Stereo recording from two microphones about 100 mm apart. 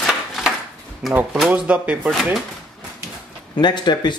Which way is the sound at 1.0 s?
Centre (ahead or behind).